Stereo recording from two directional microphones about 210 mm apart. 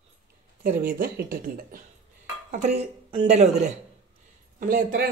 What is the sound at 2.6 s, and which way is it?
Speech, 30° right (ahead or behind).